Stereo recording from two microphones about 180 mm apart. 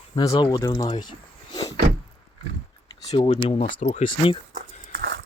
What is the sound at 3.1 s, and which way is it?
Speech, 30° left (ahead or behind).